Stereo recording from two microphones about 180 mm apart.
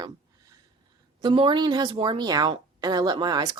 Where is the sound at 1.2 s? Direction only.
25° right (ahead or behind).